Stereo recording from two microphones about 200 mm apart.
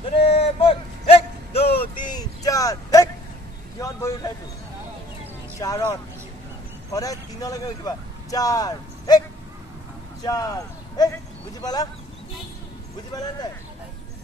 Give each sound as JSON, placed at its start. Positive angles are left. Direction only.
{"t": 0.2, "sound": "a sound", "side_deg": 30}
{"t": 3.8, "sound": "vehicle", "side_deg": 15}
{"t": 5.6, "sound": "speech", "side_deg": 15}
{"t": 10.2, "sound": "speech", "side_deg": 20}